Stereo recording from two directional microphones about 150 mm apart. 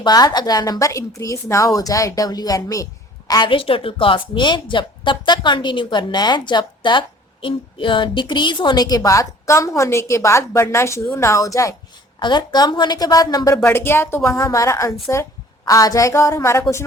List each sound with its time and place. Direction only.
0.0 s a woman's voice: 25° left (ahead or behind)
13.6 s a woman's voice: 15° left (ahead or behind)